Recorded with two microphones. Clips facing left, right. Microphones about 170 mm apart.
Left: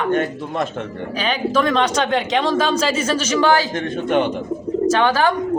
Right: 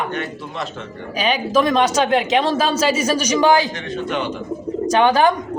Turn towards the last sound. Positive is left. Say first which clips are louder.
# right 2 dB
turn(degrees=-15)  # may be behind; listen again after turning